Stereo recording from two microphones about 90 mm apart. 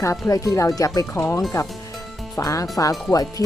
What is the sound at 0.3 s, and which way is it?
Speech, 40° left (ahead or behind).